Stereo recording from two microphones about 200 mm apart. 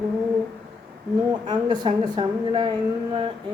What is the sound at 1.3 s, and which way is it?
A woman's voice, 20° right (ahead or behind).